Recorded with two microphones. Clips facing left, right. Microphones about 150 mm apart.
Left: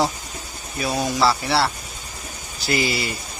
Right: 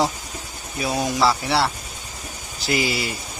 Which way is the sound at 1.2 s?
15° right (ahead or behind).